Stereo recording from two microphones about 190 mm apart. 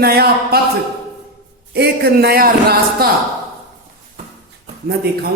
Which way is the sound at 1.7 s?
60° right (ahead or behind).